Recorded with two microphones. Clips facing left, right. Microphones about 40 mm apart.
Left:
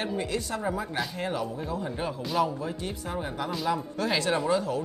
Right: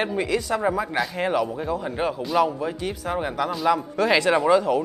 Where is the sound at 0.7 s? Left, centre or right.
Right.